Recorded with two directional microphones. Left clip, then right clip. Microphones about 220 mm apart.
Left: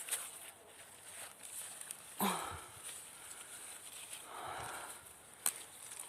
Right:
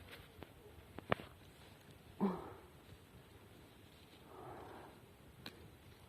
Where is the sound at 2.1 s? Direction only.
35° left (ahead or behind).